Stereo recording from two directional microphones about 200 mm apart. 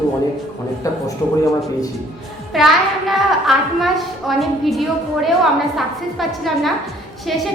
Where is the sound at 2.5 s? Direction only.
Centre (ahead or behind).